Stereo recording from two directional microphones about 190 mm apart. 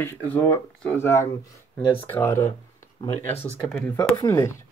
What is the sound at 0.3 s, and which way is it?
Speech, 10° left (ahead or behind).